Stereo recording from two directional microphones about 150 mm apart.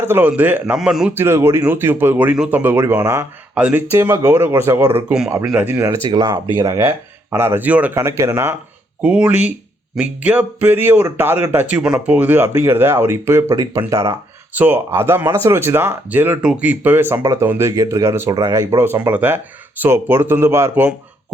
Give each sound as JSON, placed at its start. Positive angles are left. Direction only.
{"t": 0.0, "sound": "speech", "side_deg": -15}
{"t": 6.1, "sound": "speech", "side_deg": -25}
{"t": 6.7, "sound": "speech", "side_deg": -15}
{"t": 9.0, "sound": "speech", "side_deg": -10}
{"t": 14.5, "sound": "speech", "side_deg": -10}